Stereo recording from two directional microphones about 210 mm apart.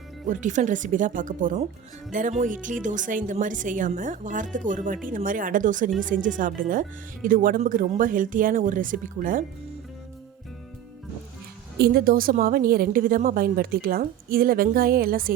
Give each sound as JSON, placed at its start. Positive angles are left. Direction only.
{"t": 0.3, "sound": "speech", "side_deg": -35}
{"t": 11.8, "sound": "a woman's voice", "side_deg": -45}